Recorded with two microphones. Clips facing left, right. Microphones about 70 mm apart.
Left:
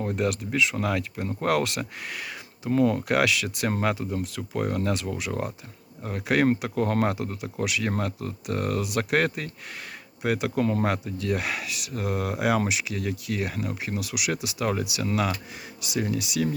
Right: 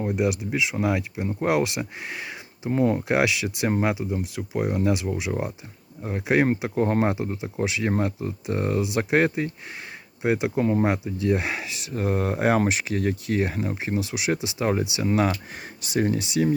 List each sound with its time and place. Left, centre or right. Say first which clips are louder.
0.0 s speech: right 2 dB; centre